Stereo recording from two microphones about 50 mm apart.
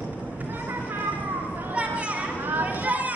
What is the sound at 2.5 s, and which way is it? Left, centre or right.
Children playing, right.